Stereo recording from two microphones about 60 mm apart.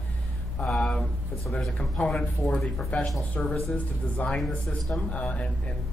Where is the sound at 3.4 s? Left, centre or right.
Left.